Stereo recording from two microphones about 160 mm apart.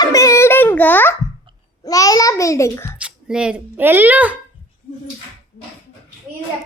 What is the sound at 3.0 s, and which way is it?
Speech, 5° right (ahead or behind).